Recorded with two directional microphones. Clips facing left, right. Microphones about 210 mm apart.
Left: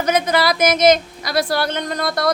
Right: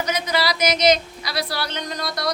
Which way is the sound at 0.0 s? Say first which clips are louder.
Left 6 dB; 55° left (ahead or behind).